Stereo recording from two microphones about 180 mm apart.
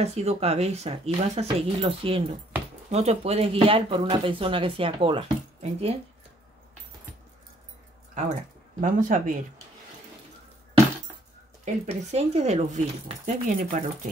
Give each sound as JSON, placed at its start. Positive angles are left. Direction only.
{"t": 0.0, "sound": "speech", "side_deg": -35}
{"t": 8.8, "sound": "speech", "side_deg": -45}
{"t": 11.6, "sound": "speech", "side_deg": -40}